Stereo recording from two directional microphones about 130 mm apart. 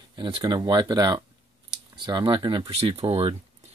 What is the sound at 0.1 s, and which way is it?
Speech, 40° right (ahead or behind).